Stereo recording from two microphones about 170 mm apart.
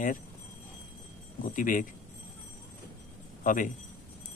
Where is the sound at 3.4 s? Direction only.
50° left (ahead or behind).